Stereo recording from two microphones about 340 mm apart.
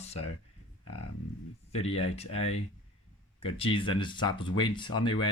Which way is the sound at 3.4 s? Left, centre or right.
Centre.